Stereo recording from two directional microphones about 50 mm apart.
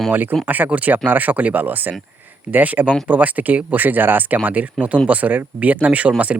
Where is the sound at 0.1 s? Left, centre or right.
Right.